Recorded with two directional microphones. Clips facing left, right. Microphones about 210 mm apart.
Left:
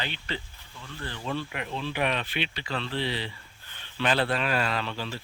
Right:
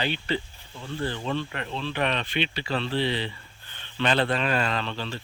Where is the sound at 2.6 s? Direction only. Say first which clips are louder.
Right 6 dB; 30° right (ahead or behind).